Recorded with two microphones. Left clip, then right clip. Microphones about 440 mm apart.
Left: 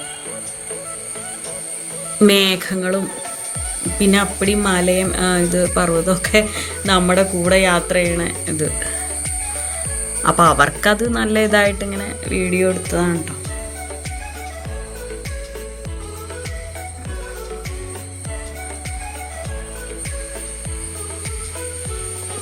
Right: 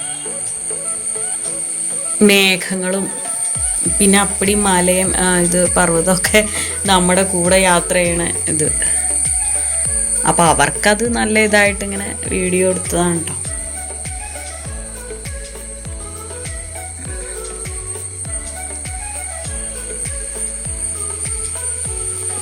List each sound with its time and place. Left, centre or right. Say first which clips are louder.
2.2 s speech: right 2 dB; left
10.2 s speech: even; left